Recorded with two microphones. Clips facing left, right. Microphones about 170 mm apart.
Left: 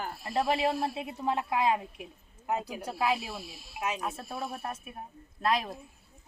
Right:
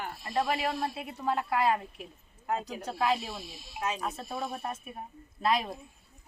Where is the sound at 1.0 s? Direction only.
20° left (ahead or behind); by 5.7 s centre (ahead or behind).